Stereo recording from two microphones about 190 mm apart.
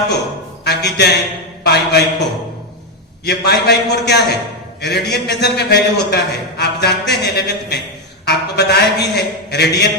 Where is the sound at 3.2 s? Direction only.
60° left (ahead or behind).